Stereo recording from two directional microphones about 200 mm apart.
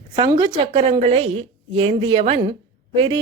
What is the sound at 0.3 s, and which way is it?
A woman's voice, 20° right (ahead or behind).